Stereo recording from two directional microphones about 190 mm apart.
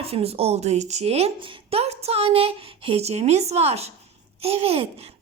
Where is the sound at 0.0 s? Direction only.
30° right (ahead or behind).